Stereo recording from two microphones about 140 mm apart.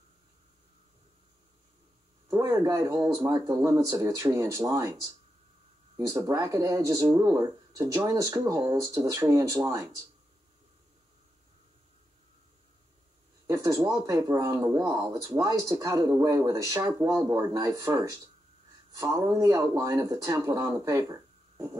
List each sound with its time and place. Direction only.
2.2 s speech: 25° right (ahead or behind)
6.2 s speech: 25° right (ahead or behind)
13.5 s speech: 25° right (ahead or behind)